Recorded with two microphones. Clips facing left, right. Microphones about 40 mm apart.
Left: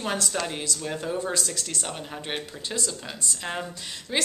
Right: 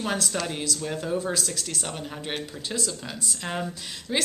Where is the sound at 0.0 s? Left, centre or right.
Centre.